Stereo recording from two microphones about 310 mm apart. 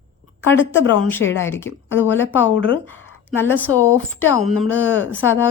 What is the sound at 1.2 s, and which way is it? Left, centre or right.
Speech, left.